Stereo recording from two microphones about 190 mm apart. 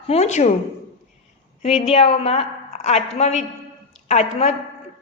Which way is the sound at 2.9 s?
35° left (ahead or behind).